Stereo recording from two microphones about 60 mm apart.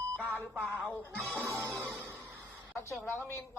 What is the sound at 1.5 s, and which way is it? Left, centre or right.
Music, right.